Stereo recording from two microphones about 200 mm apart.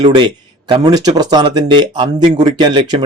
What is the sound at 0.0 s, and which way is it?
Speech, 25° right (ahead or behind).